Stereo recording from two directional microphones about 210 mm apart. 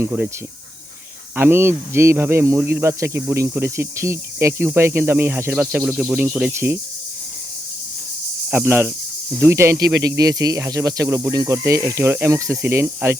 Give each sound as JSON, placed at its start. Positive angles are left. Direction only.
{"t": 0.0, "sound": "speech", "side_deg": -10}
{"t": 1.4, "sound": "speech", "side_deg": -10}
{"t": 8.4, "sound": "speech", "side_deg": -10}